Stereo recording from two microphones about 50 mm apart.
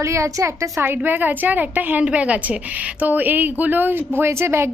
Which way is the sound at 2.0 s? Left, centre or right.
Right.